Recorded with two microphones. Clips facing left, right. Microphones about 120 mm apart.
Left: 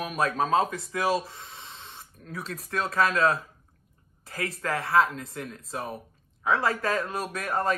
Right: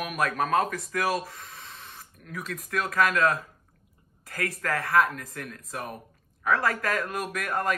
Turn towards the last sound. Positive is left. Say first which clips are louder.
# left 1 dB
turn(degrees=30)  # may be behind; listen again after turning